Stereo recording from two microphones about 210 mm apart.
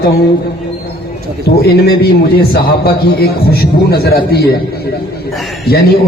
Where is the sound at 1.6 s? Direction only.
50° left (ahead or behind).